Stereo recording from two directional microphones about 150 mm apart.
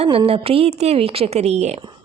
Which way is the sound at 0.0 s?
40° right (ahead or behind).